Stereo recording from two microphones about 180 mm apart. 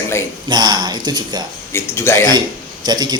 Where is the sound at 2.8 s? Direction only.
25° right (ahead or behind).